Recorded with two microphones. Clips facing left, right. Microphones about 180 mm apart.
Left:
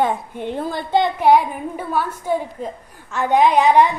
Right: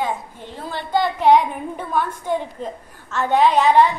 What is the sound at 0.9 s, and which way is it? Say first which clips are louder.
A woman's voice: left 1 dB; 20° left (ahead or behind).